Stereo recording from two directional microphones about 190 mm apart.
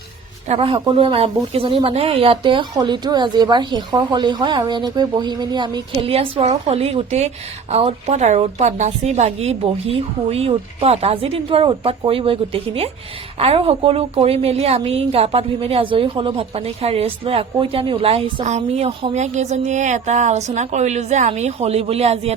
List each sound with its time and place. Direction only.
0.4 s a woman's voice: 30° right (ahead or behind)